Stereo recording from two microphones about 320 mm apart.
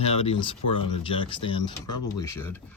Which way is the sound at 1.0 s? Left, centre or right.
Centre.